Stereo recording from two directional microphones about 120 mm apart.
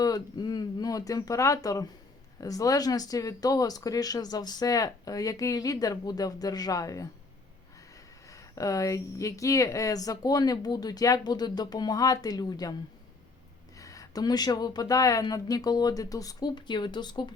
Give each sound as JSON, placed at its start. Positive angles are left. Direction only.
{"t": 0.0, "sound": "speech", "side_deg": 35}
{"t": 8.3, "sound": "speech", "side_deg": 30}
{"t": 13.7, "sound": "speech", "side_deg": 30}